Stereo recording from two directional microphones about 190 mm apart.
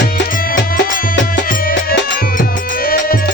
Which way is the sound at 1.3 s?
50° left (ahead or behind).